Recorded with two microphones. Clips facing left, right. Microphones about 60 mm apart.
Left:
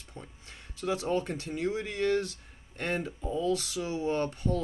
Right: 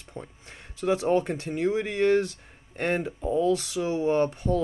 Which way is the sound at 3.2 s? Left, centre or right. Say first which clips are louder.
Right 7 dB; right.